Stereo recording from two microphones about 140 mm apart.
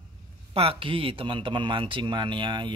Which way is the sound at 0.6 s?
40° right (ahead or behind).